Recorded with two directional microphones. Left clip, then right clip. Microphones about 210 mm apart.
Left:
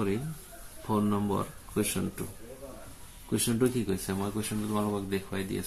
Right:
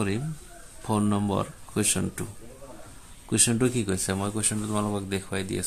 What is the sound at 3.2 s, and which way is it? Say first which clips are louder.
Speech: right 4 dB; 55° right (ahead or behind).